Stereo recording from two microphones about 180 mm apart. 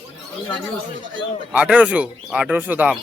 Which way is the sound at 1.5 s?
5° right (ahead or behind).